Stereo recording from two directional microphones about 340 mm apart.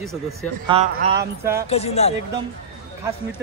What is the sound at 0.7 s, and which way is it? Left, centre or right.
Speech, centre.